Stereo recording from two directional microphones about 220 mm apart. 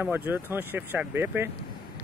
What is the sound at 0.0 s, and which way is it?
Speech, 10° right (ahead or behind).